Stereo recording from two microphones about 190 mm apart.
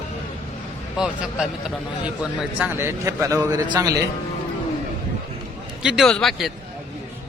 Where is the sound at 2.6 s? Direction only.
10° right (ahead or behind).